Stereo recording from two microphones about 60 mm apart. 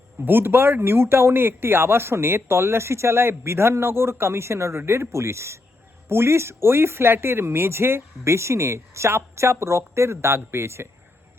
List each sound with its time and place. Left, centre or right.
0.3 s speech: right